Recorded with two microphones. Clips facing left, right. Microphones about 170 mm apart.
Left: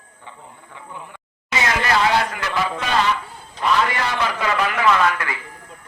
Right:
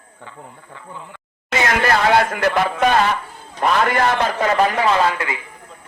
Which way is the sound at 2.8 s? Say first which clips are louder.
Right 5 dB; 50° right (ahead or behind).